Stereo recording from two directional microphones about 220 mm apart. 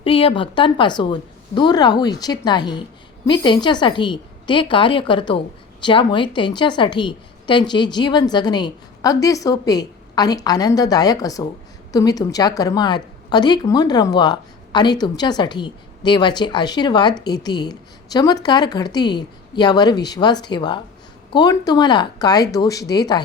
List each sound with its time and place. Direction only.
0.0 s speech: 25° left (ahead or behind)